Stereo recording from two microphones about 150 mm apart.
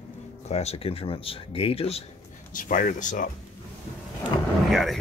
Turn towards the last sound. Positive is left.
turn(degrees=0)  # may be behind; listen again after turning